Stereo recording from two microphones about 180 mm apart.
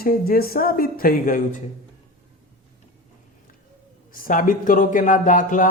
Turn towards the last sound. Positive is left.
turn(degrees=45)  # may be behind; listen again after turning